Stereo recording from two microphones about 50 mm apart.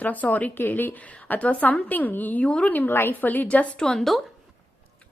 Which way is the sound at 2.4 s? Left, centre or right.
Left.